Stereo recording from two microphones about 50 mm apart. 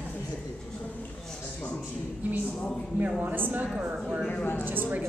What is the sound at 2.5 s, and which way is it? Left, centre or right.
Speech, centre.